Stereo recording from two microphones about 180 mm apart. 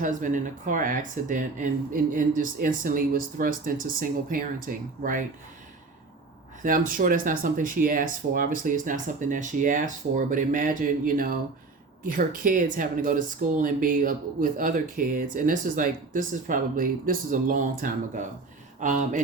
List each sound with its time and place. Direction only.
0.0 s speech: 45° right (ahead or behind)
6.6 s speech: 50° right (ahead or behind)